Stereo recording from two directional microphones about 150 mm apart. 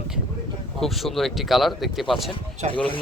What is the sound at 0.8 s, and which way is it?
A man's voice, centre (ahead or behind).